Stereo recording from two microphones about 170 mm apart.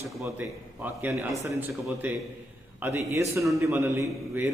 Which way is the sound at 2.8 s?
15° right (ahead or behind).